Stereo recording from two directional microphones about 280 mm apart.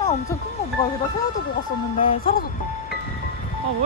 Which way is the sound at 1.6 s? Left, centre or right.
Left.